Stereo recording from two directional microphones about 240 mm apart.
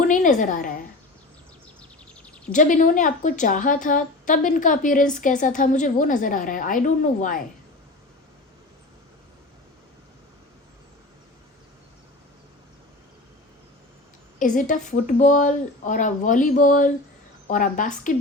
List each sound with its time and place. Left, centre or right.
0.0 s a woman's voice: left
2.2 s bird: centre
2.5 s a woman's voice: left
14.3 s a woman's voice: left